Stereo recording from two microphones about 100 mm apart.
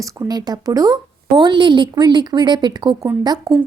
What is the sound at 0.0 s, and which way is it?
Speech, 40° right (ahead or behind).